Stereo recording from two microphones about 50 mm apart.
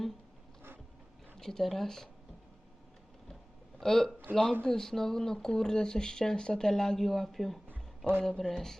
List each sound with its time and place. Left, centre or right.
1.4 s speech: centre
3.8 s speech: centre
7.7 s a sound: right
8.2 s speech: centre